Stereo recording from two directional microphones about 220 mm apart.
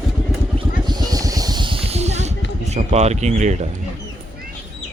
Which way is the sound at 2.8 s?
30° right (ahead or behind).